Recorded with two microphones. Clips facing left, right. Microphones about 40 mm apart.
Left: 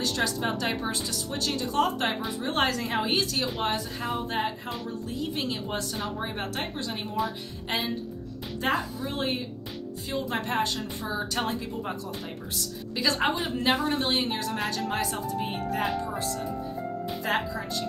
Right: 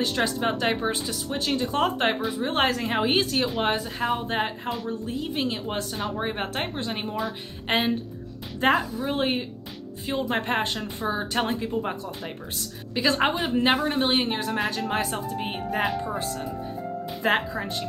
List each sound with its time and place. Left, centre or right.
0.0 s speech: right
2.3 s speech: centre
4.6 s speech: centre
5.0 s speech: right
7.6 s a woman's voice: right; by 10.3 s centre
10.3 s speech: right
12.9 s speech: right
13.3 s speech: centre
13.6 s speech: centre
17.2 s speech: right